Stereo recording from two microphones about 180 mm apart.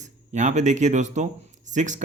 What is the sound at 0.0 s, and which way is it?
Speech, 40° right (ahead or behind).